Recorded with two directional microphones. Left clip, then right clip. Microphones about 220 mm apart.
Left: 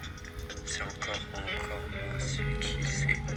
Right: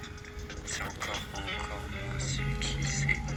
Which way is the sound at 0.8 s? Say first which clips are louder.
Even; 40° left (ahead or behind).